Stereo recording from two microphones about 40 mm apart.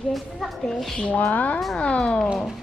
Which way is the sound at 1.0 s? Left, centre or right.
Left.